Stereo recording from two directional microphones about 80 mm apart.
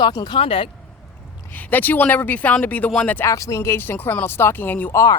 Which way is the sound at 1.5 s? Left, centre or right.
Left.